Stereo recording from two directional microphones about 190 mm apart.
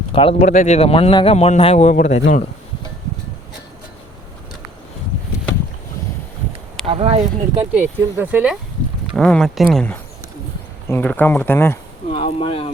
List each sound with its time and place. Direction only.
0.1 s a man's voice: 30° left (ahead or behind)
6.8 s speech: 30° right (ahead or behind)
7.7 s speech: 10° right (ahead or behind)
9.1 s speech: centre (ahead or behind)
12.1 s speech: 30° left (ahead or behind)